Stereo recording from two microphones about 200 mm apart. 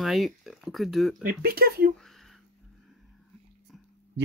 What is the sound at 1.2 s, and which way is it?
Speech, 50° right (ahead or behind).